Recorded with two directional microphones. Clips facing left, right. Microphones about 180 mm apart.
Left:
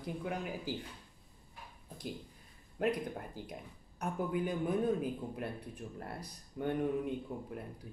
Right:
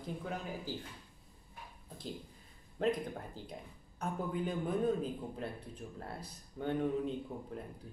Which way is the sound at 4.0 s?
15° left (ahead or behind).